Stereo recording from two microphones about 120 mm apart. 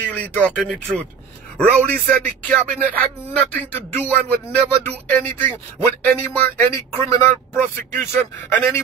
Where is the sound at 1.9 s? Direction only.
10° left (ahead or behind).